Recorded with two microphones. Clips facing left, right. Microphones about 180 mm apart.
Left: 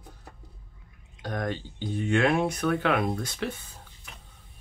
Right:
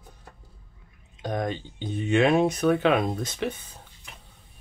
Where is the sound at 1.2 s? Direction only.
20° right (ahead or behind).